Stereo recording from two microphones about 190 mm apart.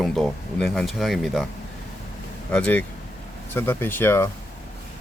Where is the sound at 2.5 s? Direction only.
5° left (ahead or behind).